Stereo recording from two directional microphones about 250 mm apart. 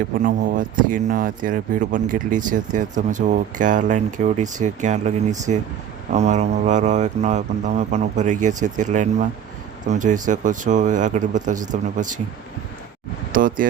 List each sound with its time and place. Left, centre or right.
0.2 s speech: right
13.3 s speech: right